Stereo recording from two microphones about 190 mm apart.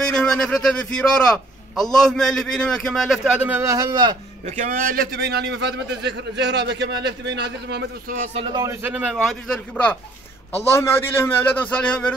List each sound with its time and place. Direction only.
0.0 s a man's voice: 5° left (ahead or behind); by 4.1 s 20° right (ahead or behind)
4.5 s a man's voice: 45° right (ahead or behind); by 7.8 s 60° right (ahead or behind)
8.4 s a man's voice: 25° right (ahead or behind)
8.8 s a man's voice: 5° right (ahead or behind)